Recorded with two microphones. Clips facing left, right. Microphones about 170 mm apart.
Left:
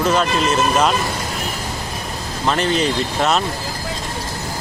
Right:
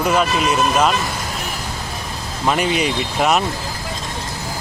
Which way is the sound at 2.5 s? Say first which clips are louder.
Even; 10° right (ahead or behind).